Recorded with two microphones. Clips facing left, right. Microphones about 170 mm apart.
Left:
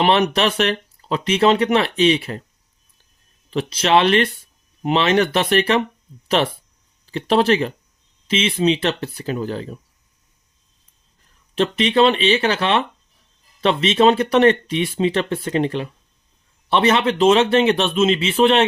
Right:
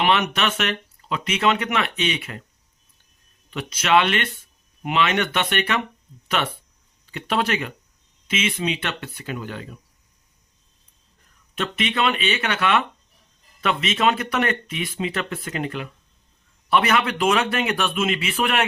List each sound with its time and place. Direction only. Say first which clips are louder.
0.0 s speech: left 5 dB; 35° left (ahead or behind)
3.5 s speech: left 3 dB; 30° left (ahead or behind)
11.5 s speech: left 8 dB; 30° left (ahead or behind)